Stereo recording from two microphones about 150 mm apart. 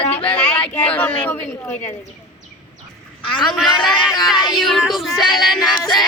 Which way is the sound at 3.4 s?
Centre (ahead or behind).